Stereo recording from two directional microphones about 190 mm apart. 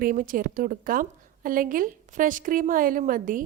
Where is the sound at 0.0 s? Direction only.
45° right (ahead or behind).